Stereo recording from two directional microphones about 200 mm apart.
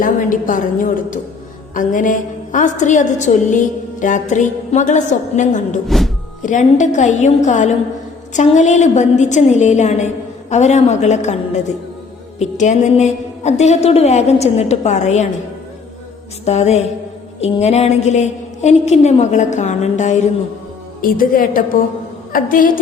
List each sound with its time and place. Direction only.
0.0 s a woman's voice: 40° left (ahead or behind)
16.5 s a woman's voice: 35° left (ahead or behind)